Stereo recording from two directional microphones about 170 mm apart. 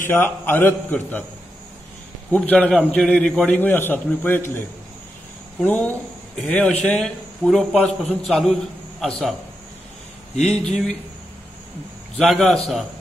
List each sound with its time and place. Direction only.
0.1 s a man's voice: 10° left (ahead or behind)
2.3 s a man's voice: 10° left (ahead or behind)
10.4 s a man's voice: 5° left (ahead or behind)
12.2 s a man's voice: centre (ahead or behind)